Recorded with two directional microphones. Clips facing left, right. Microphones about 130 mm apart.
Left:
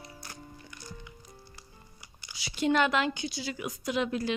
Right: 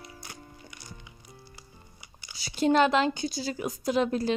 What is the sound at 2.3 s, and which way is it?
A woman's voice, 35° right (ahead or behind).